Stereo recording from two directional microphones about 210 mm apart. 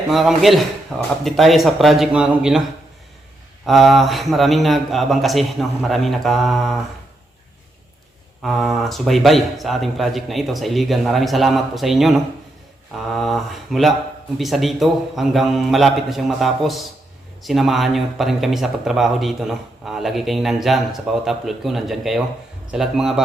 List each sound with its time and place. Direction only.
0.1 s a man's voice: centre (ahead or behind)
3.7 s a man's voice: centre (ahead or behind)
8.4 s a man's voice: centre (ahead or behind)